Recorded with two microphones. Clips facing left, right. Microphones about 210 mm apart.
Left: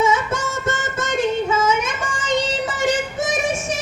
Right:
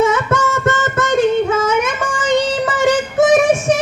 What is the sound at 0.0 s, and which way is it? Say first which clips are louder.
Music: right 5 dB; 65° right (ahead or behind).